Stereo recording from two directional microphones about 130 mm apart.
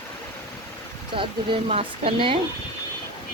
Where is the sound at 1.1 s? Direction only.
40° right (ahead or behind).